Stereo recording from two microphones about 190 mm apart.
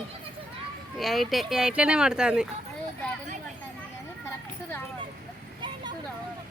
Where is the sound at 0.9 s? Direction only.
Centre (ahead or behind).